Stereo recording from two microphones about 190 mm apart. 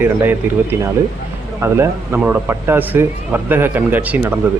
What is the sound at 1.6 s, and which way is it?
Speech, 10° right (ahead or behind).